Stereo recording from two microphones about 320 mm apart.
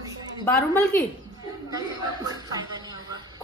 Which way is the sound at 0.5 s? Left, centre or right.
Centre.